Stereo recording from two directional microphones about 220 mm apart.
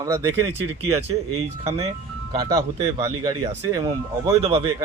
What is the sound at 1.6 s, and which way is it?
Speech, 30° right (ahead or behind).